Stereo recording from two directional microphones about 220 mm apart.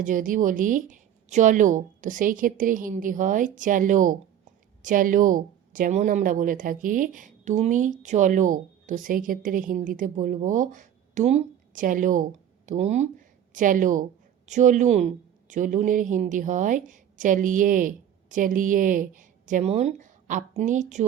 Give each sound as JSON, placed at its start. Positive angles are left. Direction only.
{"t": 0.0, "sound": "speech", "side_deg": -35}